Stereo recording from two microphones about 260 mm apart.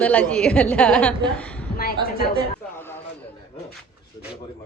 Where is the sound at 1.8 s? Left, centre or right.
Left.